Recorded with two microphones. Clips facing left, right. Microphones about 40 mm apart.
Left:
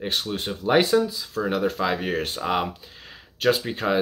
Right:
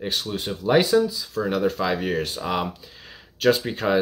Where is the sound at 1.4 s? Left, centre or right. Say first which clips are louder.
Right 1 dB; centre.